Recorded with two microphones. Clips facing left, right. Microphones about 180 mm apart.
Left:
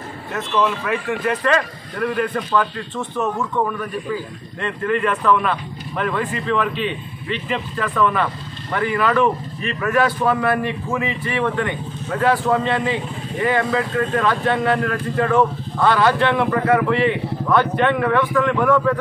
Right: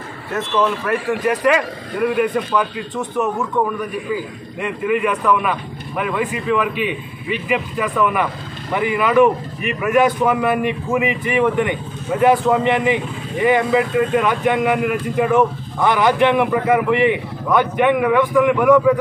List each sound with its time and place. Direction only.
0.3 s speech: centre (ahead or behind)
1.2 s a man's voice: 15° right (ahead or behind)